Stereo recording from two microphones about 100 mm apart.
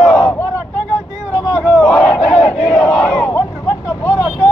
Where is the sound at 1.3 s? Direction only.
25° left (ahead or behind).